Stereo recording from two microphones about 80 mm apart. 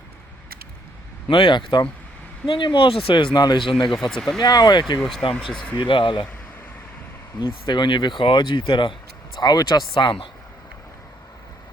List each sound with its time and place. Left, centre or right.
1.3 s speech: left
2.5 s speech: left
3.3 s speech: left
3.7 s speech: left
3.9 s speech: centre
4.4 s speech: left
4.9 s speech: centre
5.7 s speech: left
7.3 s speech: left